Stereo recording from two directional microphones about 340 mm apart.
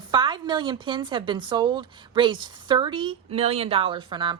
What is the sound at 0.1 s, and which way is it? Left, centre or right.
A woman's voice, centre.